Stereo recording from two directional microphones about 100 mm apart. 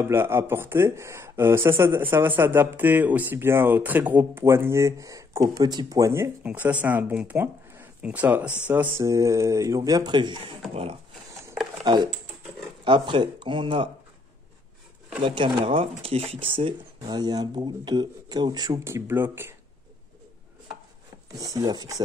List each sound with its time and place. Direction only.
0.0 s speech: 25° right (ahead or behind)
6.4 s speech: 15° right (ahead or behind)
9.0 s speech: 30° right (ahead or behind); by 10.4 s 50° right (ahead or behind)
10.7 s speech: 75° right (ahead or behind)
11.8 s speech: 45° right (ahead or behind)
15.2 s speech: 55° right (ahead or behind)
17.0 s speech: 40° right (ahead or behind)
18.9 s speech: 25° right (ahead or behind)
21.3 s speech: 40° right (ahead or behind)